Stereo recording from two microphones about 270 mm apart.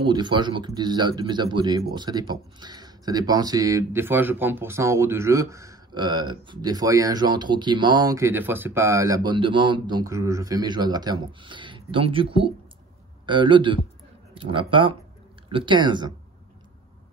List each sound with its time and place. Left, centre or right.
0.0 s speech: centre